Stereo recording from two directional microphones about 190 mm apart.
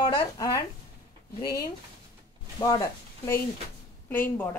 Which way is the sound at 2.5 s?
20° left (ahead or behind).